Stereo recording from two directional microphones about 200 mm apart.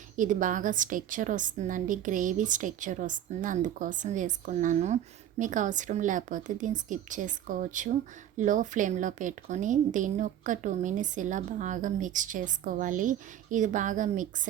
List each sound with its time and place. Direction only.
0.2 s a woman's voice: 40° right (ahead or behind)